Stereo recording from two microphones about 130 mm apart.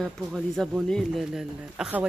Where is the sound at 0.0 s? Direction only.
Centre (ahead or behind).